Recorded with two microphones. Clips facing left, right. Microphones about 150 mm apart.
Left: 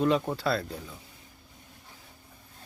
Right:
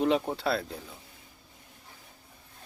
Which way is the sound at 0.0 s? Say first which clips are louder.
Left 1 dB; 15° right (ahead or behind).